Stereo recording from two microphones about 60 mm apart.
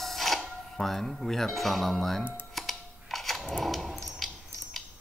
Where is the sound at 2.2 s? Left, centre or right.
Left.